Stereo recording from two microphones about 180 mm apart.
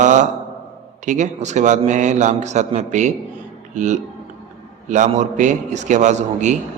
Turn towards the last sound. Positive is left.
turn(degrees=-40)  # may be behind; listen again after turning